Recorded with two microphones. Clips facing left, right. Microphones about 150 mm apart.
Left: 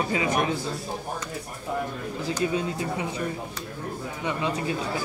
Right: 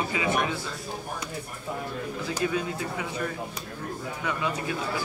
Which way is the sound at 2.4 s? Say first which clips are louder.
Left 2 dB; 25° left (ahead or behind).